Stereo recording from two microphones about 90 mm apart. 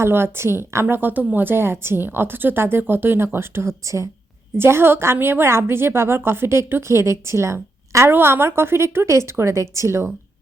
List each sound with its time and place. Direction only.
0.0 s a woman's voice: 25° right (ahead or behind)